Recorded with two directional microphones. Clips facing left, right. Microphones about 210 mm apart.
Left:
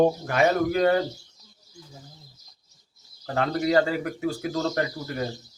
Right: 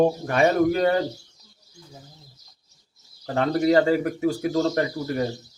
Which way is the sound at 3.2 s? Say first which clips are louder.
Right 4 dB; 30° right (ahead or behind).